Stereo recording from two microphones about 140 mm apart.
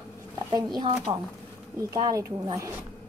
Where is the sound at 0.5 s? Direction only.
30° right (ahead or behind).